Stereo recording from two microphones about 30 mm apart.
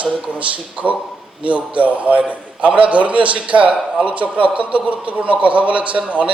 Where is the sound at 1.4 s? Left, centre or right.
Right.